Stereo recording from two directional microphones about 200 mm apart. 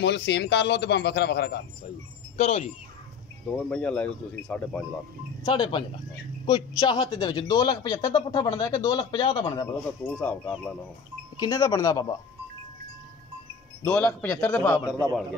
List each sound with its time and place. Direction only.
0.0 s a man's voice: 60° left (ahead or behind)
2.3 s speech: 30° left (ahead or behind)
3.4 s speech: 5° left (ahead or behind)
5.4 s speech: 25° left (ahead or behind)
10.0 s speech: 5° left (ahead or behind)
13.8 s speech: 5° left (ahead or behind)